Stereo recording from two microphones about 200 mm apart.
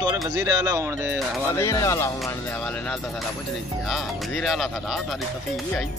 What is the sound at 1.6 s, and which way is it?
Speech, 15° left (ahead or behind).